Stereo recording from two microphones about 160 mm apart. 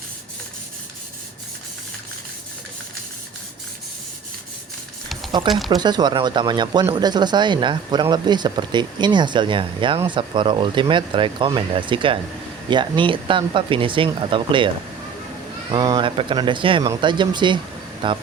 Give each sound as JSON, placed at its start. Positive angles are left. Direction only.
{"t": 5.5, "sound": "speech", "side_deg": 0}
{"t": 5.7, "sound": "speech", "side_deg": -25}
{"t": 15.7, "sound": "speech", "side_deg": -25}